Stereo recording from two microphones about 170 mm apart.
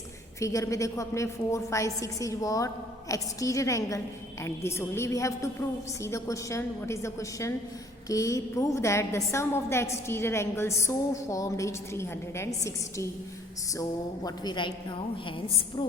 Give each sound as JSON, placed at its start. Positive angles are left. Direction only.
{"t": 0.3, "sound": "a woman's voice", "side_deg": 20}
{"t": 14.3, "sound": "a woman's voice", "side_deg": 25}